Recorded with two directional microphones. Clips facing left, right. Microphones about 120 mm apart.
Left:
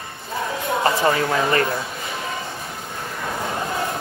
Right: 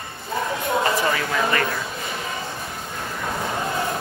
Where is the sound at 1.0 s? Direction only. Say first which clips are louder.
Left 3 dB; 30° left (ahead or behind).